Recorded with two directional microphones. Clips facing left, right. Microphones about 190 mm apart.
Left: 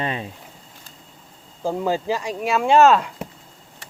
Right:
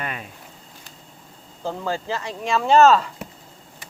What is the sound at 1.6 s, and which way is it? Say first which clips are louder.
Speech: left 5 dB; 15° left (ahead or behind).